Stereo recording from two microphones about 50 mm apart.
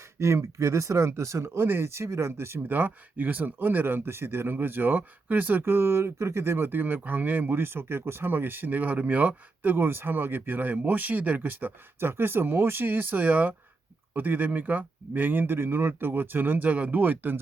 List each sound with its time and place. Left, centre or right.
0.2 s speech: right
1.6 s speech: right
2.6 s speech: right
4.5 s speech: right
7.6 s speech: right
9.7 s speech: right
11.9 s speech: right